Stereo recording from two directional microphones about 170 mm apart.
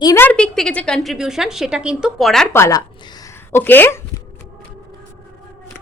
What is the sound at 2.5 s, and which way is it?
Speech, 20° left (ahead or behind).